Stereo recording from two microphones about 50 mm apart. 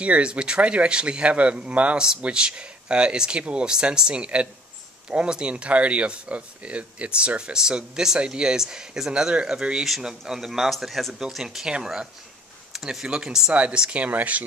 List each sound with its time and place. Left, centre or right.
0.0 s a man's voice: right; by 11.1 s centre
11.1 s speech: centre; by 14.4 s right